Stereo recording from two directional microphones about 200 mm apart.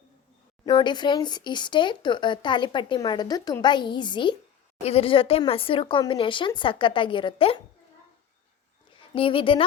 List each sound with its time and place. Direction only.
0.6 s speech: 25° left (ahead or behind)
9.1 s speech: 25° left (ahead or behind)